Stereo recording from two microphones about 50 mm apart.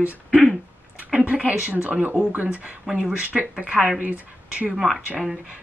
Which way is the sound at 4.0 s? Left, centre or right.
Right.